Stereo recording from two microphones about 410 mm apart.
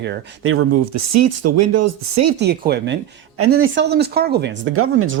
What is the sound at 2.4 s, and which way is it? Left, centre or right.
Speech, right.